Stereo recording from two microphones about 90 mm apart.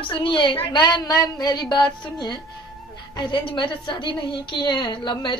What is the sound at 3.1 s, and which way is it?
A woman's voice, 65° left (ahead or behind).